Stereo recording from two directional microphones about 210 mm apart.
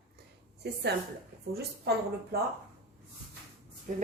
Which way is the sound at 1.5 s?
50° right (ahead or behind).